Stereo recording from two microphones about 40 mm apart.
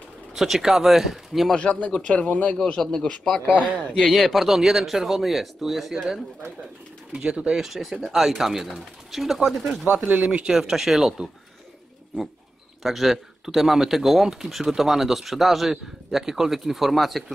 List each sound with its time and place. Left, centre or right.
0.3 s speech: centre
1.5 s speech: left
2.5 s a man's voice: left
4.1 s speech: centre
7.2 s speech: right
7.5 s speech: centre
10.0 s speech: right
10.4 s speech: centre
12.8 s speech: centre